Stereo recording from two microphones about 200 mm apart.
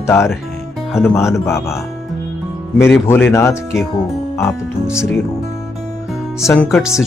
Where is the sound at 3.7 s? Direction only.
Centre (ahead or behind).